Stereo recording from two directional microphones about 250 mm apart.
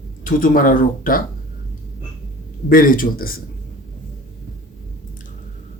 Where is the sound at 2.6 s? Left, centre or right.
Left.